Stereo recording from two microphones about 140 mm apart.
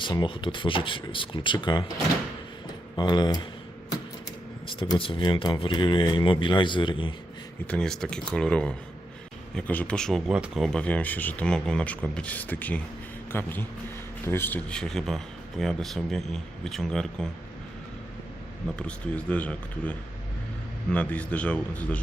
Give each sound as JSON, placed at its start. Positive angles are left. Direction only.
{"t": 0.0, "sound": "speech", "side_deg": 35}
{"t": 2.9, "sound": "speech", "side_deg": 30}
{"t": 4.7, "sound": "speech", "side_deg": 40}
{"t": 7.7, "sound": "speech", "side_deg": 5}
{"t": 18.8, "sound": "speech", "side_deg": 10}